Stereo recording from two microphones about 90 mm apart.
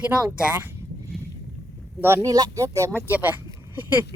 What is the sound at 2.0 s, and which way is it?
Speech, 25° right (ahead or behind).